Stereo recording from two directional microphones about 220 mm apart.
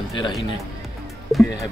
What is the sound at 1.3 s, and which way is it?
Music, centre (ahead or behind).